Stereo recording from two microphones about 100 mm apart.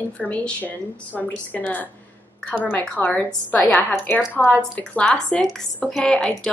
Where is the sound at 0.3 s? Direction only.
15° left (ahead or behind).